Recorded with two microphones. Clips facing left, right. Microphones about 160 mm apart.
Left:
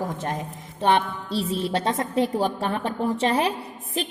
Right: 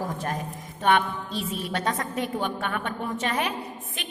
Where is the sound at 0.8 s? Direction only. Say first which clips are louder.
Left 1 dB; 30° left (ahead or behind).